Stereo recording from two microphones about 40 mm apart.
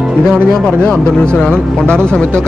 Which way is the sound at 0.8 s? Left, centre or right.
Left.